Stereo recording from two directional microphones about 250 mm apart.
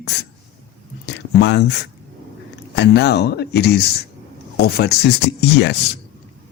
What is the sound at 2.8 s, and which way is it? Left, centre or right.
Speech, left.